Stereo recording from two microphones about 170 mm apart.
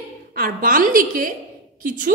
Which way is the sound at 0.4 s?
55° right (ahead or behind).